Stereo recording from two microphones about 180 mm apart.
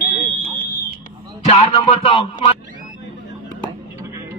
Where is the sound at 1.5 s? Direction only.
30° left (ahead or behind).